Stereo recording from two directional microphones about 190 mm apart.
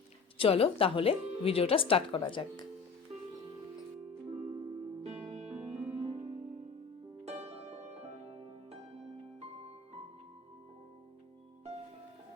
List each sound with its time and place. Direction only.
0.3 s speech: 30° left (ahead or behind)
4.3 s music: 30° right (ahead or behind)
7.3 s music: 35° right (ahead or behind)